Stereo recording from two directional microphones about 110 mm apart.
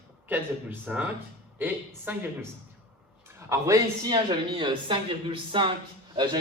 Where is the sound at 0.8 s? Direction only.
15° right (ahead or behind).